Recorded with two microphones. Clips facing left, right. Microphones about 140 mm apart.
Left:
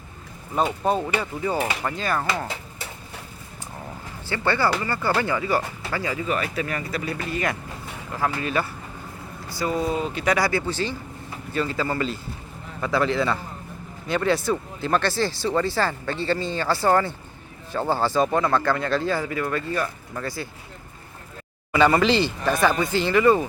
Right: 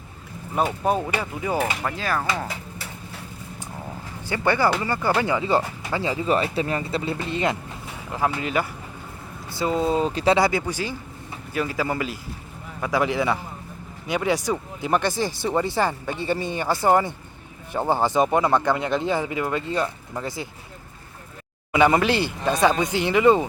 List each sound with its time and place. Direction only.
0.5 s speech: 10° right (ahead or behind)
4.3 s speech: 15° right (ahead or behind); by 10.3 s 35° right (ahead or behind)
10.3 s speech: 20° right (ahead or behind)
21.7 s speech: 15° right (ahead or behind)